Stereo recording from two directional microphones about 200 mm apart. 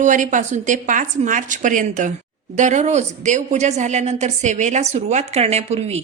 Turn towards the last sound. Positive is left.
turn(degrees=-30)  # may be behind; listen again after turning